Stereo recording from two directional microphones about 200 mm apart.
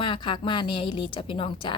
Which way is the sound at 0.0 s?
25° left (ahead or behind).